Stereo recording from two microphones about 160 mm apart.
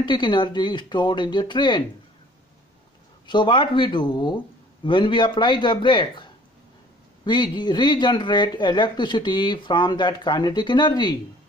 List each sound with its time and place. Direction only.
0.0 s speech: 30° left (ahead or behind)
3.3 s speech: 30° left (ahead or behind)